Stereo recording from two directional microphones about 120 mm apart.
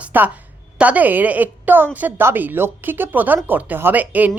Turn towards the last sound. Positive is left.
turn(degrees=-15)  # may be behind; listen again after turning